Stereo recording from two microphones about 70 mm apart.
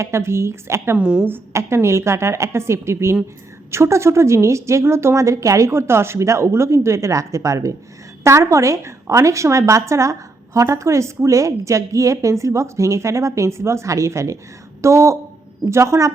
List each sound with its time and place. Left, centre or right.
0.0 s a woman's voice: right
0.9 s speech: centre
1.5 s a woman's voice: right